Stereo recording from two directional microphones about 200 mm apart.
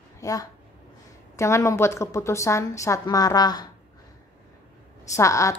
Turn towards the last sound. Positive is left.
turn(degrees=15)  # may be behind; listen again after turning